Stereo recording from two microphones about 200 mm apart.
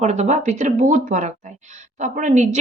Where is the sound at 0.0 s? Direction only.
35° right (ahead or behind).